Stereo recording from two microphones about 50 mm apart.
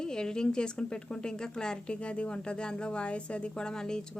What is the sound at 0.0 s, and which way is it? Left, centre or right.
Speech, centre.